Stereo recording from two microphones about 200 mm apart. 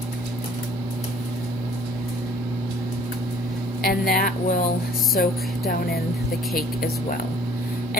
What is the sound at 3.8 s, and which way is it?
A woman's voice, 45° left (ahead or behind).